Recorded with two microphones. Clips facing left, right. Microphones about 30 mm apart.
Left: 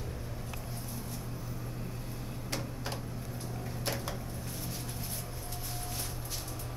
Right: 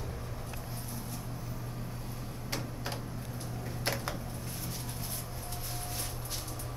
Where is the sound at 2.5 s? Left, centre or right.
Centre.